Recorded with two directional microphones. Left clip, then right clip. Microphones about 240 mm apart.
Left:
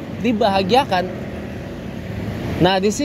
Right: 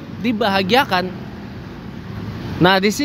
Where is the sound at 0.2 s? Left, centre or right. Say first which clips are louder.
Left 1 dB; centre.